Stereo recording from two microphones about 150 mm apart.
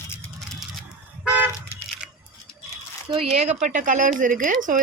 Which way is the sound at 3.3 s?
50° right (ahead or behind).